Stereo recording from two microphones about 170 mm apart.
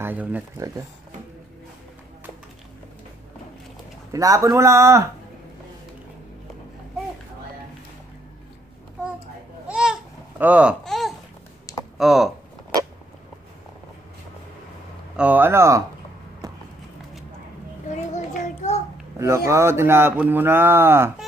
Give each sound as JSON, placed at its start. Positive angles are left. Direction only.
{"t": 0.0, "sound": "speech", "side_deg": -10}
{"t": 4.1, "sound": "speech", "side_deg": -20}
{"t": 9.7, "sound": "babbling", "side_deg": -5}
{"t": 10.4, "sound": "a sound", "side_deg": -10}
{"t": 11.7, "sound": "computer keyboard", "side_deg": 20}
{"t": 12.0, "sound": "speech", "side_deg": 0}
{"t": 15.1, "sound": "speech", "side_deg": -10}
{"t": 18.1, "sound": "child singing", "side_deg": 45}
{"t": 19.1, "sound": "speech", "side_deg": -15}